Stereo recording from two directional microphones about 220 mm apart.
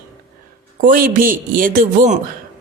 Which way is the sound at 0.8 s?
40° right (ahead or behind).